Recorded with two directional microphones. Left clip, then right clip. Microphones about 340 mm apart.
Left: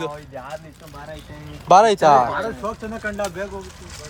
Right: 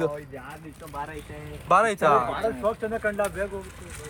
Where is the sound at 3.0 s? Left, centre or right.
Left.